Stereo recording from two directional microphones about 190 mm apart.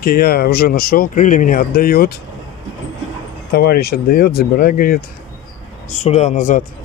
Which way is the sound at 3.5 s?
55° left (ahead or behind).